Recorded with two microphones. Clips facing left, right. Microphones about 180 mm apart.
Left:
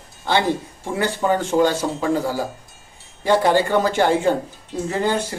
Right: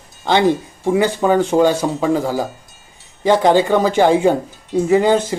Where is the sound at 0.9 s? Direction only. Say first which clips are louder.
Right 5 dB; 15° right (ahead or behind).